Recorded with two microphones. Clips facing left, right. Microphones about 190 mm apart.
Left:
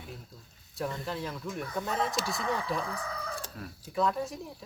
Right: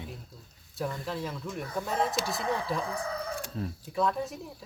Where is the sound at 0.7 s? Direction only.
Centre (ahead or behind).